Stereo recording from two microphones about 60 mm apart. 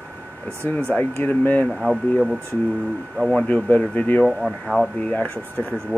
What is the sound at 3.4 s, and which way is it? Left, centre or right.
Speech, left.